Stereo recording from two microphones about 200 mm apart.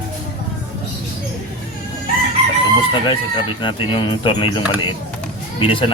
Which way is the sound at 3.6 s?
25° left (ahead or behind).